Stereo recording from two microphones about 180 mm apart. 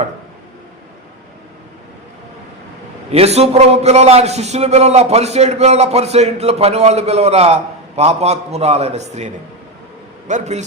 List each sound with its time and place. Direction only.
3.1 s a man's voice: 35° right (ahead or behind)